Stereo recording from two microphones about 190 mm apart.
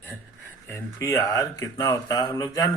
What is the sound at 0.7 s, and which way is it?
Speech, 15° left (ahead or behind).